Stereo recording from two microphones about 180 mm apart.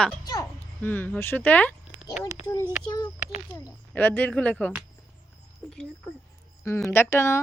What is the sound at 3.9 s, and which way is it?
Speech, 10° left (ahead or behind).